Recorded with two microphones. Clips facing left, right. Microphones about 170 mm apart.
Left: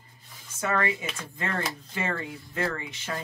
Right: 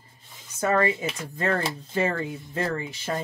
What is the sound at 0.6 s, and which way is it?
Speech, 35° right (ahead or behind).